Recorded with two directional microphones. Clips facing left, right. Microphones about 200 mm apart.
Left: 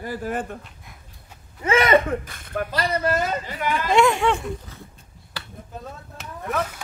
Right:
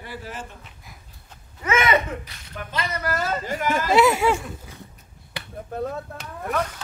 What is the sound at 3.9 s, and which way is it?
Speech, 5° right (ahead or behind).